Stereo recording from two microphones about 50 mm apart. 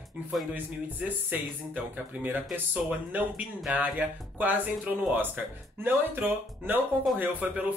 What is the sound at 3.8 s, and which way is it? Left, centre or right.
Speech, right.